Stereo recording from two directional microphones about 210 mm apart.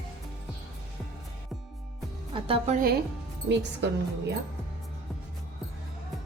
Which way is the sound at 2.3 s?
25° right (ahead or behind).